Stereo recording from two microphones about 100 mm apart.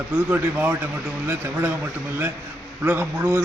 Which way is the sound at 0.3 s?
20° right (ahead or behind).